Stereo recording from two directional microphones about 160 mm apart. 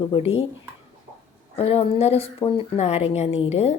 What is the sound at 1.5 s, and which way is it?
Speech, 35° left (ahead or behind).